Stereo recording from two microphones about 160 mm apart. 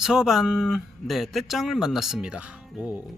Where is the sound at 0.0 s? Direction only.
5° right (ahead or behind).